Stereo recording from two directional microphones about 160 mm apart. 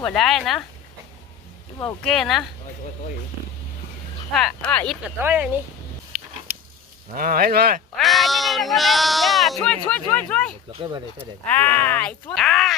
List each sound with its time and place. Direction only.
0.0 s speech: centre (ahead or behind)
2.0 s speech: centre (ahead or behind)
4.3 s speech: centre (ahead or behind)
5.0 s speech: 10° right (ahead or behind)
7.2 s speech: 65° right (ahead or behind)
7.9 s speech: centre (ahead or behind)